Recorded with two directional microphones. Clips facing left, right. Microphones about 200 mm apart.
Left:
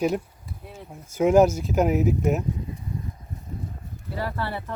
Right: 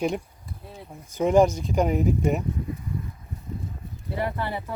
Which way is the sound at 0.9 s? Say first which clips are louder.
Left 3 dB; 10° left (ahead or behind).